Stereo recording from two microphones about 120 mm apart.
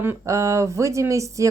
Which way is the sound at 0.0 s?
20° right (ahead or behind).